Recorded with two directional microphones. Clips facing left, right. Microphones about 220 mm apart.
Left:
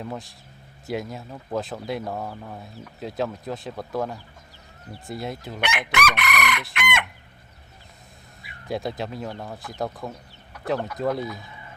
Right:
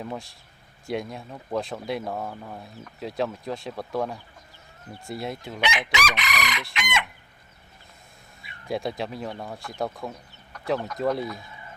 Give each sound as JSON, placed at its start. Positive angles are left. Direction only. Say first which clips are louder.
{"t": 0.0, "sound": "speech", "louder": "left 1 dB", "side_deg": 0}
{"t": 5.5, "sound": "chicken", "louder": "left 1 dB", "side_deg": 55}
{"t": 8.6, "sound": "speech", "louder": "even", "side_deg": 0}